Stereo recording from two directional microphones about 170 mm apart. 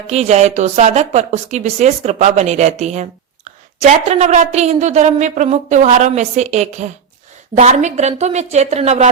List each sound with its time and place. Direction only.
0.1 s a woman's voice: 40° right (ahead or behind)